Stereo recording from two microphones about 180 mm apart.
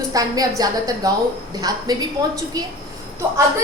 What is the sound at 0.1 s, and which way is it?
A woman's voice, 20° right (ahead or behind).